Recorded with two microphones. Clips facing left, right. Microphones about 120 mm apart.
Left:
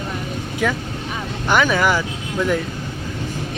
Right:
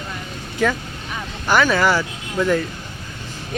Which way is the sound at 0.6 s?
10° left (ahead or behind).